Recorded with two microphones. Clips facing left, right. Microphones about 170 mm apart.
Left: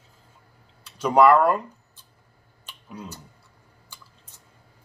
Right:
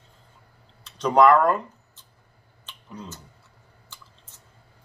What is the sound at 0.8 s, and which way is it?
Speech, 10° left (ahead or behind).